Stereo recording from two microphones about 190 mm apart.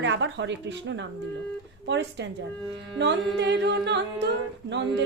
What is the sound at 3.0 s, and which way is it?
Carnatic music, 65° right (ahead or behind).